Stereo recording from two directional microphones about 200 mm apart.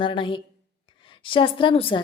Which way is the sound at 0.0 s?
25° left (ahead or behind).